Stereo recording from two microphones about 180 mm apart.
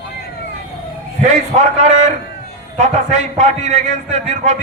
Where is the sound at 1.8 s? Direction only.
40° right (ahead or behind).